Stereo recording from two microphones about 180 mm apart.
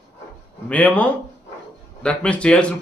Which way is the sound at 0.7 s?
10° left (ahead or behind).